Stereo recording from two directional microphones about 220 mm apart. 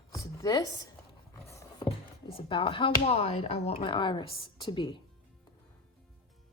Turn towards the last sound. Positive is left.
turn(degrees=20)  # may be behind; listen again after turning